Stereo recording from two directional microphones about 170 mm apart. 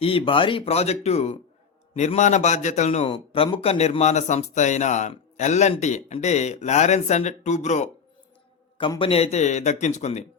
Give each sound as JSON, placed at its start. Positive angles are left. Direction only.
{"t": 0.0, "sound": "a man's voice", "side_deg": 35}
{"t": 8.8, "sound": "a man's voice", "side_deg": 30}